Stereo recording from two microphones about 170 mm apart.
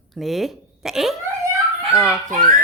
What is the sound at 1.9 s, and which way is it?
Speech, 20° left (ahead or behind).